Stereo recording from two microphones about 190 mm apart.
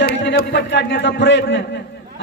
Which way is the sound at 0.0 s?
60° left (ahead or behind).